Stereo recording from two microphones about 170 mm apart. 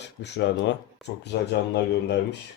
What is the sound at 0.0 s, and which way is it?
Speech, 90° left.